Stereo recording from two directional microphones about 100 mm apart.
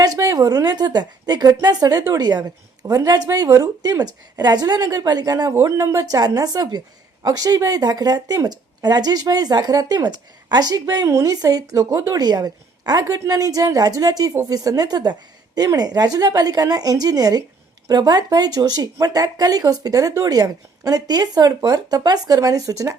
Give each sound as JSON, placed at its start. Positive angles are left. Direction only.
{"t": 0.0, "sound": "a woman's voice", "side_deg": -40}